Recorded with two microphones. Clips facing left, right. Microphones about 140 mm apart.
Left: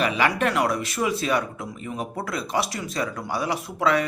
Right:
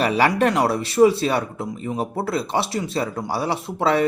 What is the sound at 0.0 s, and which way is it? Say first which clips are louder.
Speech: right 4 dB; 40° right (ahead or behind).